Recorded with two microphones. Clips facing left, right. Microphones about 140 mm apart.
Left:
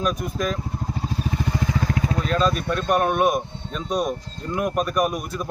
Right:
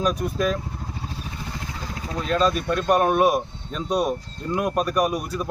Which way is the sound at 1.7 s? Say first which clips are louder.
Left 10 dB; 75° left (ahead or behind).